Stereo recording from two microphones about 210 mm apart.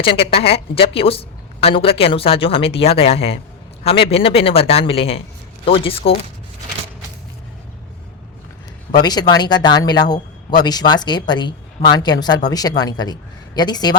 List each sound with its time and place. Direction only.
0.0 s speech: 25° left (ahead or behind)
8.9 s speech: 20° left (ahead or behind)